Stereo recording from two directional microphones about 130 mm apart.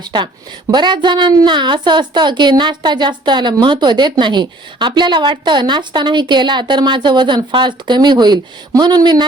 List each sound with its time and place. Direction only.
0.0 s a woman's voice: 35° right (ahead or behind)